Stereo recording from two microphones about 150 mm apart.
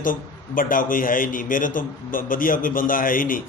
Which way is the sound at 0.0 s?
65° left (ahead or behind).